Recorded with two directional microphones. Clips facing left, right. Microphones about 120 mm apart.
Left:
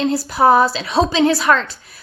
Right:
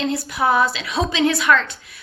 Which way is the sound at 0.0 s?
35° left (ahead or behind).